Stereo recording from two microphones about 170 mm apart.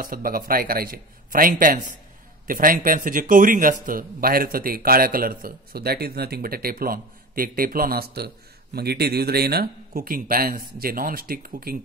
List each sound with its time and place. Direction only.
0.0 s a man's voice: 55° right (ahead or behind)